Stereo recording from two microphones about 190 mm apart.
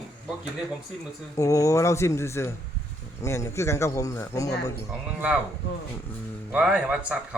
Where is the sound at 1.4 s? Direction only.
15° left (ahead or behind).